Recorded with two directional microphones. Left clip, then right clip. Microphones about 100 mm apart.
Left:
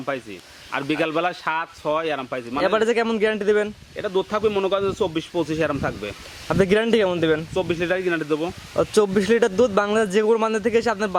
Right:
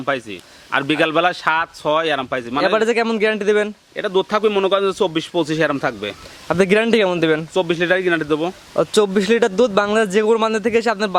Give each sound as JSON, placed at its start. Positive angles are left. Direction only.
{"t": 0.0, "sound": "speech", "side_deg": -55}
{"t": 2.6, "sound": "a man's voice", "side_deg": -5}
{"t": 3.9, "sound": "speech", "side_deg": -55}
{"t": 6.5, "sound": "a man's voice", "side_deg": -10}
{"t": 7.5, "sound": "speech", "side_deg": -55}
{"t": 8.7, "sound": "a man's voice", "side_deg": -10}